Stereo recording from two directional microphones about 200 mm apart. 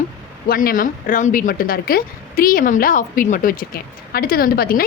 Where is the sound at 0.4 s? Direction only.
45° left (ahead or behind).